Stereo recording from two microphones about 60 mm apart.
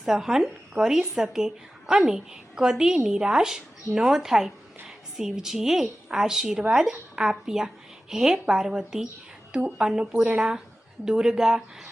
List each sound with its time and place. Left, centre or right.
0.0 s a woman's voice: centre
10.1 s speech: right
10.3 s a woman's voice: centre